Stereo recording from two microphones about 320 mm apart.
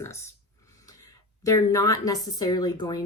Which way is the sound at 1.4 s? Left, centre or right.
Centre.